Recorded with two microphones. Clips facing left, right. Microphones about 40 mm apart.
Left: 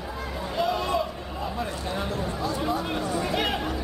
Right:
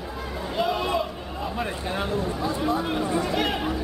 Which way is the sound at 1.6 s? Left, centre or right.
Right.